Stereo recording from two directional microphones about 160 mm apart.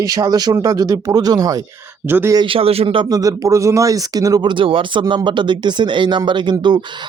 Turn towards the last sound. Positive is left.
turn(degrees=-30)  # may be behind; listen again after turning